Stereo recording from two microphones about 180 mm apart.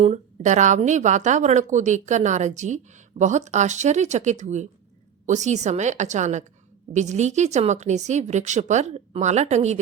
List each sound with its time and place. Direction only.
0.0 s a woman's voice: 40° right (ahead or behind)